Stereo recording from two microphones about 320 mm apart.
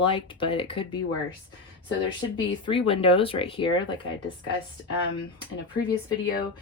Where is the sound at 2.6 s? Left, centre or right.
Centre.